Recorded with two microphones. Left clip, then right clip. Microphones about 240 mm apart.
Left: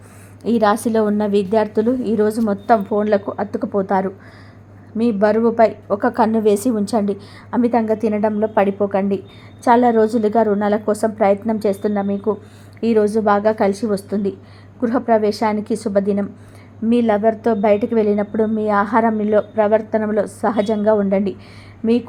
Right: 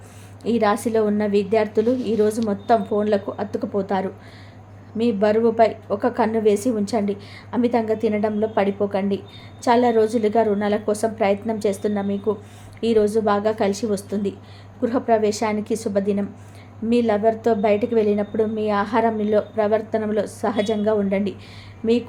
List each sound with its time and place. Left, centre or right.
0.5 s a woman's voice: centre